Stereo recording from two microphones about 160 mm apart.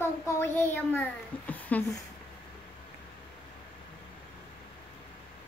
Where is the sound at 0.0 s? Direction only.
15° left (ahead or behind).